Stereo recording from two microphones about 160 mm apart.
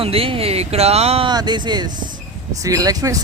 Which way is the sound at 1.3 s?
25° right (ahead or behind).